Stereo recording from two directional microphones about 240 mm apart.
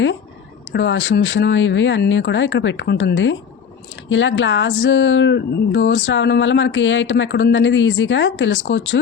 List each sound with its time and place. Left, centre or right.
0.7 s speech: left